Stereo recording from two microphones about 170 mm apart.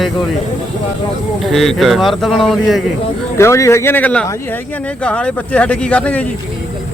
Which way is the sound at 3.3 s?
15° left (ahead or behind).